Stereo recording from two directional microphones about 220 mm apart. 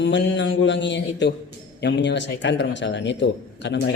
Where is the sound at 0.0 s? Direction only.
55° left (ahead or behind).